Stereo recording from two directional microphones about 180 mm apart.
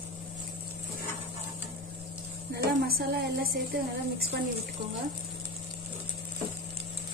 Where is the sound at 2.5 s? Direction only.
55° right (ahead or behind).